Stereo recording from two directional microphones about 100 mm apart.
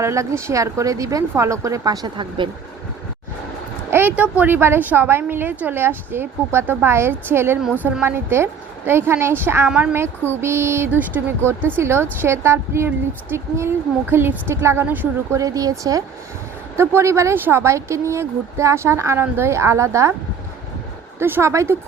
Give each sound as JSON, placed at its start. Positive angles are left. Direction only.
{"t": 0.0, "sound": "a woman's voice", "side_deg": -30}
{"t": 3.9, "sound": "a woman's voice", "side_deg": -15}
{"t": 9.6, "sound": "a woman's voice", "side_deg": -10}
{"t": 10.4, "sound": "a woman's voice", "side_deg": -25}
{"t": 15.4, "sound": "a woman's voice", "side_deg": -35}
{"t": 16.7, "sound": "a woman's voice", "side_deg": -25}
{"t": 21.2, "sound": "a woman's voice", "side_deg": -25}